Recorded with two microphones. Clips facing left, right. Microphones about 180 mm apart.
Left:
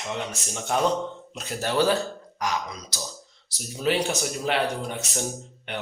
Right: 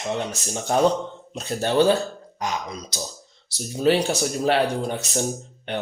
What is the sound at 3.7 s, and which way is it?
Speech, 35° right (ahead or behind).